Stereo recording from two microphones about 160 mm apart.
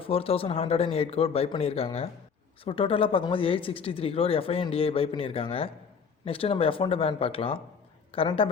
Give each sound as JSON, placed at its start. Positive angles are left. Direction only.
{"t": 0.0, "sound": "speech", "side_deg": 35}